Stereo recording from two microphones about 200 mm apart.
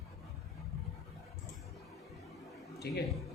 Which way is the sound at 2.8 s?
55° left (ahead or behind).